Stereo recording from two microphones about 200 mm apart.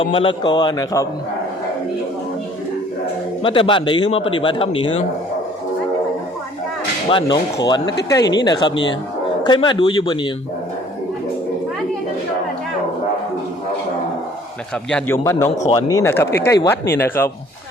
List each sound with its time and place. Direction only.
0.0 s a man's voice: 25° left (ahead or behind)
3.4 s a man's voice: 25° left (ahead or behind)
7.1 s a man's voice: 25° left (ahead or behind)
14.8 s speech: 10° left (ahead or behind)